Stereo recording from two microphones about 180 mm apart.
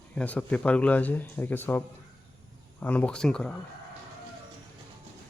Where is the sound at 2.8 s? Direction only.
5° left (ahead or behind).